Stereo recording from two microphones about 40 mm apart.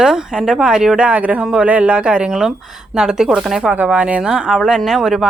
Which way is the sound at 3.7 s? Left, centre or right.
Right.